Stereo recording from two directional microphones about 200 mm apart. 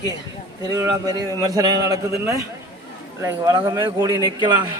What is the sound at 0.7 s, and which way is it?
A man's voice, 20° right (ahead or behind).